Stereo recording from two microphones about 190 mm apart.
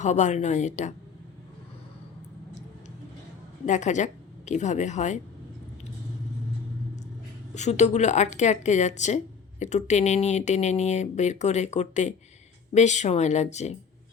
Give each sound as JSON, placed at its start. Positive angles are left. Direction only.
{"t": 0.0, "sound": "speech", "side_deg": 40}
{"t": 3.7, "sound": "speech", "side_deg": 40}
{"t": 7.5, "sound": "speech", "side_deg": 35}